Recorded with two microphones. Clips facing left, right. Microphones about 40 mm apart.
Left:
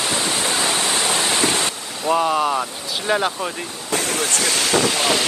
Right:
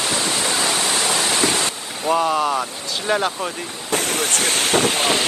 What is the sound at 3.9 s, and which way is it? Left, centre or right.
Speech, right.